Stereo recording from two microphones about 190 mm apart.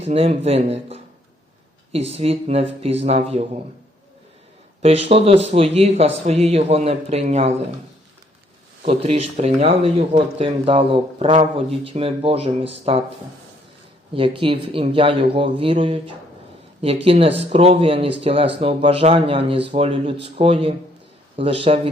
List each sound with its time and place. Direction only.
0.0 s speech: 30° right (ahead or behind)
4.8 s speech: 30° right (ahead or behind)
8.8 s a man's voice: 30° right (ahead or behind)
14.1 s a man's voice: 30° right (ahead or behind)